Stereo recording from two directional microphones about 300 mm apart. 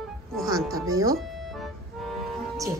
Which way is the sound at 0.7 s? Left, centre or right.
Centre.